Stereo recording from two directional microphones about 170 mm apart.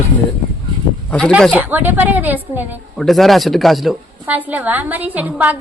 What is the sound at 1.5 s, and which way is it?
A woman's voice, 10° right (ahead or behind).